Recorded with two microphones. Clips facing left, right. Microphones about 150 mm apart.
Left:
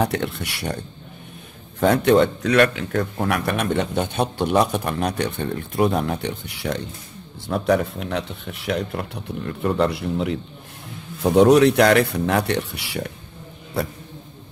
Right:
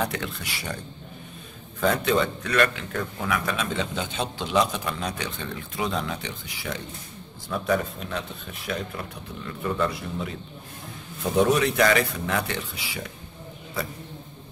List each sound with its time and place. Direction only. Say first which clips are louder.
0.0 s a man's voice: left 6 dB; 60° left (ahead or behind)
1.8 s a man's voice: left 7 dB; 60° left (ahead or behind)
2.9 s speech: left 7 dB; 40° left (ahead or behind)
3.3 s a man's voice: left 5 dB; 60° left (ahead or behind)